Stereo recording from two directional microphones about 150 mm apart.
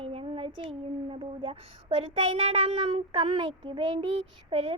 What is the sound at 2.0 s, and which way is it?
Speech, 35° right (ahead or behind).